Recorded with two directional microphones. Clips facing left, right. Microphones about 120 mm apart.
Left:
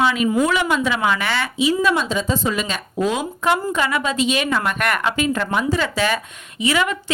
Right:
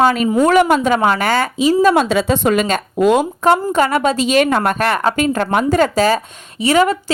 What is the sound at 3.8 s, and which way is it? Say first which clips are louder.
Speech: right 6 dB; 40° right (ahead or behind).